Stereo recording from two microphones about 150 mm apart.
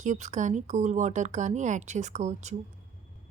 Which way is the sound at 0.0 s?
55° right (ahead or behind).